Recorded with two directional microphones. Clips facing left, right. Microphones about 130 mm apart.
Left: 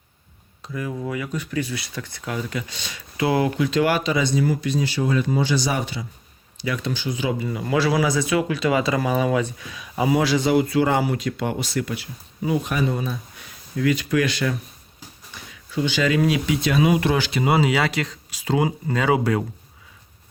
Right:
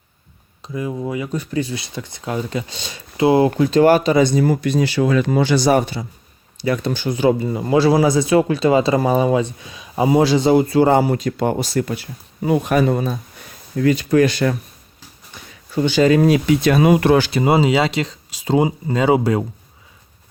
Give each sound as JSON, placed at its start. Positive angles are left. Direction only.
{"t": 0.6, "sound": "speech", "side_deg": -20}
{"t": 3.6, "sound": "speech", "side_deg": -35}
{"t": 7.4, "sound": "speech", "side_deg": -30}
{"t": 13.3, "sound": "a sound", "side_deg": -50}
{"t": 13.9, "sound": "speech", "side_deg": -35}
{"t": 15.7, "sound": "speech", "side_deg": -45}
{"t": 16.2, "sound": "speech", "side_deg": -50}
{"t": 17.3, "sound": "speech", "side_deg": -30}